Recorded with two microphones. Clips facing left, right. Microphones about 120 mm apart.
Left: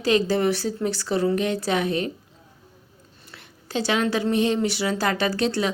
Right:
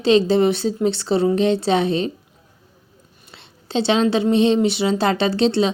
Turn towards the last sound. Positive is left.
turn(degrees=-25)  # may be behind; listen again after turning